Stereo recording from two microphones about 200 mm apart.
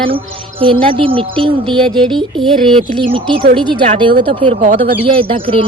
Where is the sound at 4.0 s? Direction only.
25° right (ahead or behind).